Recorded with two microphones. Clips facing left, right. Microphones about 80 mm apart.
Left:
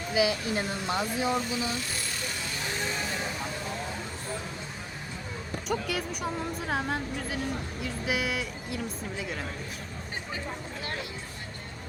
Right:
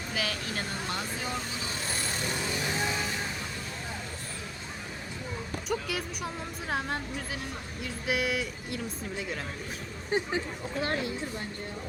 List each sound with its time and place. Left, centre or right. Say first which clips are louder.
0.1 s speech: left 8 dB; centre
2.8 s speech: right 1 dB; centre
5.6 s speech: left 2 dB; centre